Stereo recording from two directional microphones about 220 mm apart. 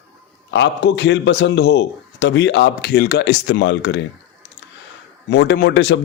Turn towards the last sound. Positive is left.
turn(degrees=55)  # may be behind; listen again after turning